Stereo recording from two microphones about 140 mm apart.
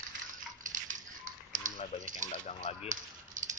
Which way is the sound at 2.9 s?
65° right (ahead or behind).